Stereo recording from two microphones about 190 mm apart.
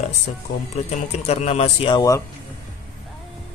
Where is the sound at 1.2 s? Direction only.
35° left (ahead or behind).